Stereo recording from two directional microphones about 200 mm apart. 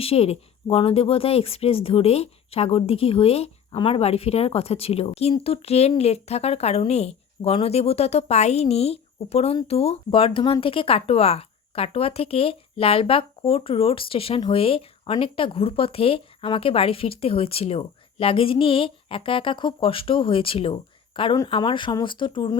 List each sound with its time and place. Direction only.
0.0 s speech: 30° left (ahead or behind)